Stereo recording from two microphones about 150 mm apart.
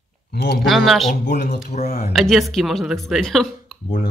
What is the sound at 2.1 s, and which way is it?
Speech, centre (ahead or behind).